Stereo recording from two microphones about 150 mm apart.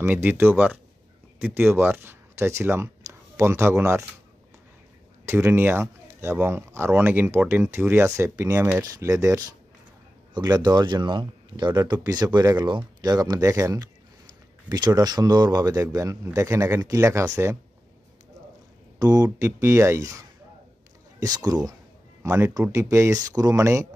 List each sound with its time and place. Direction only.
0.0 s speech: 15° right (ahead or behind)
5.2 s speech: 15° right (ahead or behind)
18.9 s speech: 25° right (ahead or behind)